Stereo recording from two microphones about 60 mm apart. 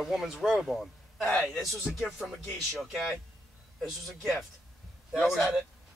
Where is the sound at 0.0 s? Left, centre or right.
Centre.